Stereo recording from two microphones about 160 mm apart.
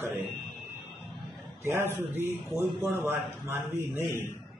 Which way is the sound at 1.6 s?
15° right (ahead or behind).